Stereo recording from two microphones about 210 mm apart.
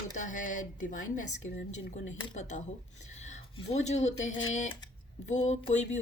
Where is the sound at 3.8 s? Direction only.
35° left (ahead or behind).